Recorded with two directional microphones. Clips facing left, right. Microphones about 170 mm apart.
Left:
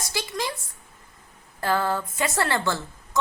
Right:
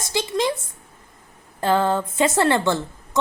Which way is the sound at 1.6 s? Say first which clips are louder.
Right 5 dB; 20° right (ahead or behind).